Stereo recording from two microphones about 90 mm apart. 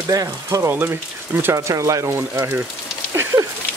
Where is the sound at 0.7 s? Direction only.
20° right (ahead or behind).